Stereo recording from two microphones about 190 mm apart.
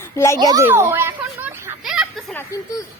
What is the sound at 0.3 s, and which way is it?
Children playing, 20° right (ahead or behind).